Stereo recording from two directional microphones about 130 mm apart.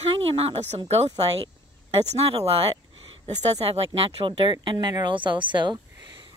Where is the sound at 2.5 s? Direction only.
40° right (ahead or behind).